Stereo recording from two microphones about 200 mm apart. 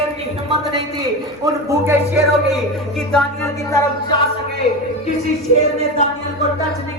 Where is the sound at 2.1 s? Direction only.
Centre (ahead or behind).